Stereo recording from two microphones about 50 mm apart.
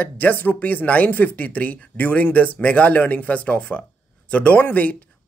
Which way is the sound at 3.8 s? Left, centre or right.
Left.